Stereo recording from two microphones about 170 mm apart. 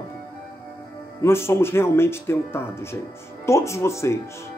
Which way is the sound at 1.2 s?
15° left (ahead or behind).